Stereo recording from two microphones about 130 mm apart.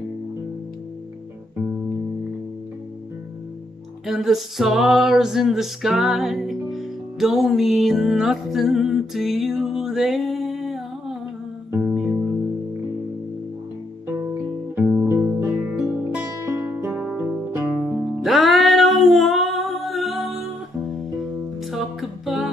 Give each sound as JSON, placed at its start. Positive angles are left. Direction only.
{"t": 4.0, "sound": "a sound", "side_deg": 0}
{"t": 11.8, "sound": "music", "side_deg": -5}
{"t": 14.0, "sound": "music", "side_deg": -25}